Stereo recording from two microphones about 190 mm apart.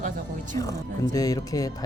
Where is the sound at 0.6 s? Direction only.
20° left (ahead or behind).